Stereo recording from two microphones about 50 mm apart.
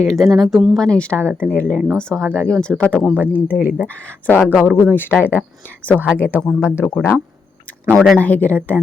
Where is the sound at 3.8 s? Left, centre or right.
Left.